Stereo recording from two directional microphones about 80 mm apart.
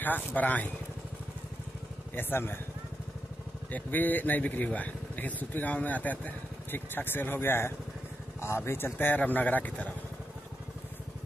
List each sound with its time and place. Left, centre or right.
0.0 s speech: left
2.1 s speech: left
3.7 s speech: left